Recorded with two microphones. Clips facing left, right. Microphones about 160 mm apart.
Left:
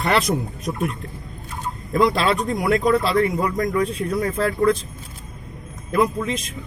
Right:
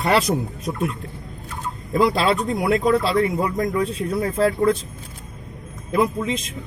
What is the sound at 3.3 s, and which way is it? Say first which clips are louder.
Speech: even; 25° right (ahead or behind).